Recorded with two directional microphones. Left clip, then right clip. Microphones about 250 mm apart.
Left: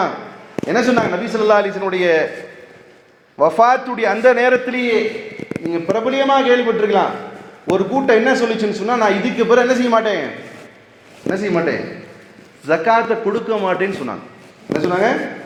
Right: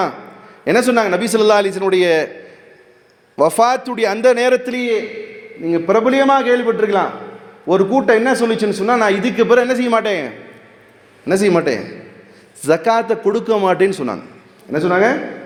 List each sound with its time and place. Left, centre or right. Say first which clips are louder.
0.7 s a man's voice: right 2 dB; right
3.3 s a man's voice: left 1 dB; right
11.3 s a man's voice: right 4 dB; right
14.8 s a man's voice: right 3 dB; right